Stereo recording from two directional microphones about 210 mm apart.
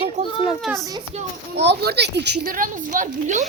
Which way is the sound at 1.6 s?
55° right (ahead or behind).